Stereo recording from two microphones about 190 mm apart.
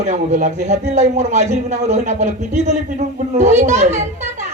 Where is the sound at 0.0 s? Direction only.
40° right (ahead or behind).